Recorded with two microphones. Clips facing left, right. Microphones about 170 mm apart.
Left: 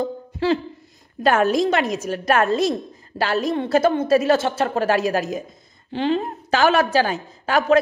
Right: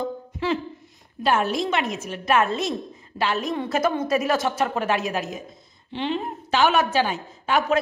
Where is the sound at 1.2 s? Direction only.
45° left (ahead or behind).